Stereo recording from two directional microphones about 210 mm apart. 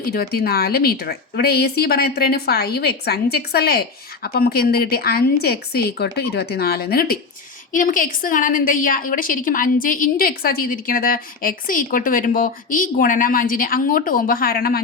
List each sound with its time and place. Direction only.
0.0 s a woman's voice: 45° left (ahead or behind)